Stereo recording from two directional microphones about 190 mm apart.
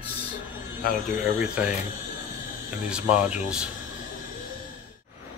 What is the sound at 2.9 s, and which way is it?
Speech, 5° right (ahead or behind).